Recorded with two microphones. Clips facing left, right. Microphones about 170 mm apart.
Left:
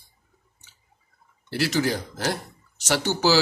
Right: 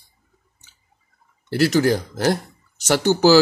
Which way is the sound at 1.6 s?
50° right (ahead or behind).